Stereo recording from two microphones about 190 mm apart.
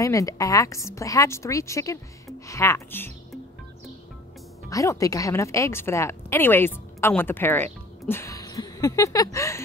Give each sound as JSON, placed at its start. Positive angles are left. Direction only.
{"t": 0.0, "sound": "a woman's voice", "side_deg": 15}
{"t": 4.6, "sound": "a woman's voice", "side_deg": 15}